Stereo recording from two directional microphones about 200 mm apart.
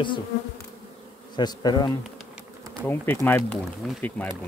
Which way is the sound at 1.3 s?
20° left (ahead or behind).